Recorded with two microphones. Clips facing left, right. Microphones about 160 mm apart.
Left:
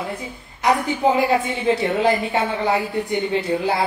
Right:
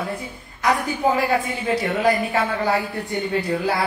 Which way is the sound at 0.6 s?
20° left (ahead or behind).